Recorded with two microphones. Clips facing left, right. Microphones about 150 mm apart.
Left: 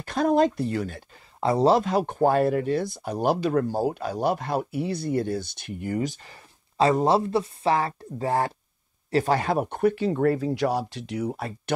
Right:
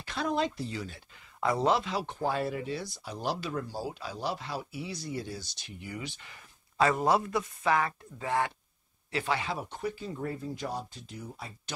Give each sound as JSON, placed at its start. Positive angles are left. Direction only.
{"t": 0.0, "sound": "speech", "side_deg": 50}
{"t": 1.4, "sound": "speech", "side_deg": 30}